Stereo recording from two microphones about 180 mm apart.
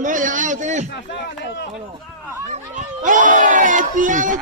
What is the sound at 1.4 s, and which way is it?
Speech, 75° left (ahead or behind).